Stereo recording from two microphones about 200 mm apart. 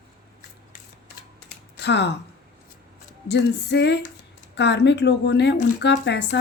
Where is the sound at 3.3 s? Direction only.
60° left (ahead or behind).